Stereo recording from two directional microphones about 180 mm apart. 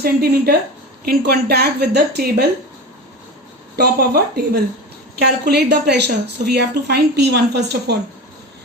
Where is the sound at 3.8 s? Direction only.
60° right (ahead or behind).